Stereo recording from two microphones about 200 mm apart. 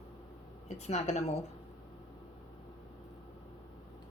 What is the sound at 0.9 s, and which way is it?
Speech, 35° left (ahead or behind).